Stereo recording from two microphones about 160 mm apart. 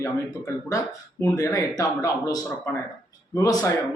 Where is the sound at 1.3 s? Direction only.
20° left (ahead or behind).